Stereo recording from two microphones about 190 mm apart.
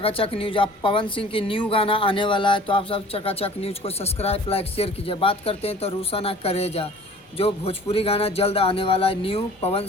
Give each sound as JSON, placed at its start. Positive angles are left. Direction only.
{"t": 0.0, "sound": "a woman's voice", "side_deg": 30}